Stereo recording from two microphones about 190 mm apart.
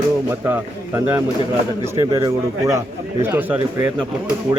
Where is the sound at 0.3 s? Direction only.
10° right (ahead or behind).